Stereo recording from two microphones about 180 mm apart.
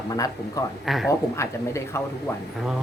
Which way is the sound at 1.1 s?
15° left (ahead or behind).